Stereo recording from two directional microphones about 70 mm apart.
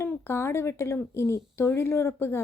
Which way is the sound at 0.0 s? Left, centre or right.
Left.